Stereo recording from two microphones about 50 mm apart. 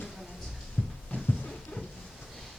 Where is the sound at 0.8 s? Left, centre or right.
Left.